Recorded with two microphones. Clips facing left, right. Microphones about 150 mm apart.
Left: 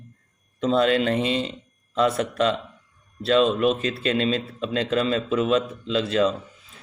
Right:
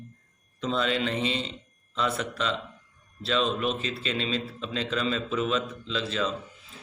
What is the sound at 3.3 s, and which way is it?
Speech, 45° left (ahead or behind).